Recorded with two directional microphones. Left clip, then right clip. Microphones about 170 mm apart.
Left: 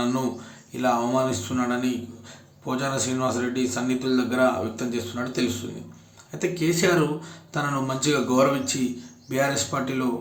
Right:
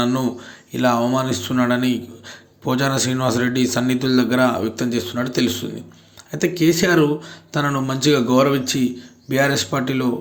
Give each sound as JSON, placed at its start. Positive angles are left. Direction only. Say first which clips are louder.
{"t": 0.7, "sound": "speech", "louder": "right 5 dB", "side_deg": -25}